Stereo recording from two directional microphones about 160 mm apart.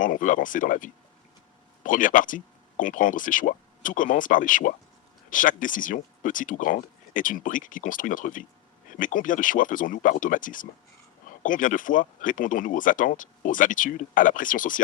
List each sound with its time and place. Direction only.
0.0 s speech: 55° left (ahead or behind)